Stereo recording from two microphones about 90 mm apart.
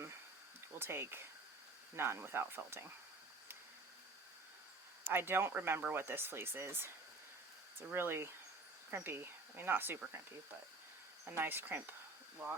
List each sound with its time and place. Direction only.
0.8 s speech: 25° right (ahead or behind)
5.0 s speech: 25° right (ahead or behind)
11.3 s speech: 25° right (ahead or behind)